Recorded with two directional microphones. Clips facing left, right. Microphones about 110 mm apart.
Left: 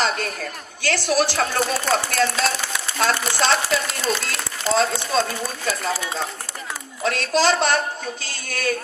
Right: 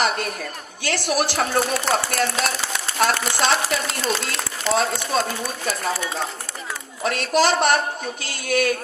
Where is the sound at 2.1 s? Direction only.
30° right (ahead or behind).